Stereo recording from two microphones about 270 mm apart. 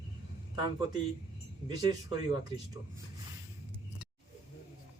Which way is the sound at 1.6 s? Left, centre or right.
Centre.